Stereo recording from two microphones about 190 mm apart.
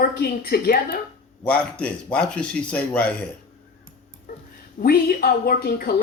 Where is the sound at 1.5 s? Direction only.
5° left (ahead or behind).